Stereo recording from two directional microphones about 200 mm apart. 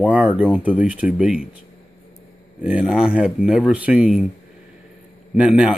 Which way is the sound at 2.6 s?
5° right (ahead or behind).